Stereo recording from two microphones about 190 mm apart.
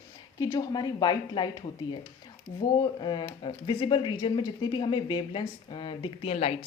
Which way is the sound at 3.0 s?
25° left (ahead or behind).